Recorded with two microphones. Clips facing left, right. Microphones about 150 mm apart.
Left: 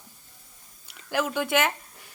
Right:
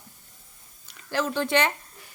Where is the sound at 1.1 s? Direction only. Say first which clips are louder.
Right 1 dB; 10° left (ahead or behind).